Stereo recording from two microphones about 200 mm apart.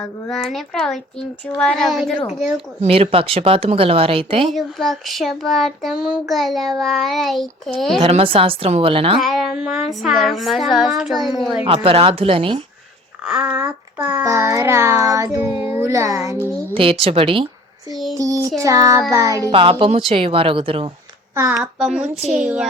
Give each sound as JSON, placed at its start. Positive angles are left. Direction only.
{"t": 0.0, "sound": "child singing", "side_deg": 0}
{"t": 2.8, "sound": "speech", "side_deg": -30}
{"t": 4.4, "sound": "child singing", "side_deg": 0}
{"t": 8.0, "sound": "speech", "side_deg": -30}
{"t": 9.1, "sound": "child singing", "side_deg": 0}
{"t": 11.7, "sound": "speech", "side_deg": -30}
{"t": 13.2, "sound": "speech", "side_deg": -5}
{"t": 13.6, "sound": "child singing", "side_deg": -5}
{"t": 16.7, "sound": "speech", "side_deg": -25}
{"t": 18.6, "sound": "child singing", "side_deg": -15}
{"t": 19.5, "sound": "speech", "side_deg": -25}
{"t": 21.3, "sound": "a child's voice", "side_deg": -15}
{"t": 21.6, "sound": "child singing", "side_deg": -5}